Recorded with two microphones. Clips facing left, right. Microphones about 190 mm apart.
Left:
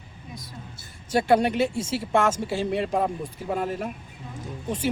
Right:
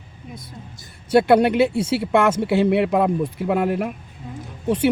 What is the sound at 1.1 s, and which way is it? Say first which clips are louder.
Speech: right 6 dB; 65° right (ahead or behind).